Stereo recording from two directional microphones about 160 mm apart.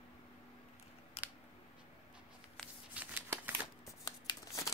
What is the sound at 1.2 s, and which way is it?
Scissors, 40° left (ahead or behind).